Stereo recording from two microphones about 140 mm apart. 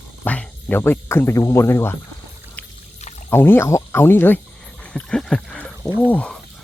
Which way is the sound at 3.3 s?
15° left (ahead or behind).